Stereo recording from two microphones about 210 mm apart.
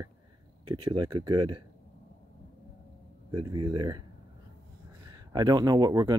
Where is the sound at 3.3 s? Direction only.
20° right (ahead or behind).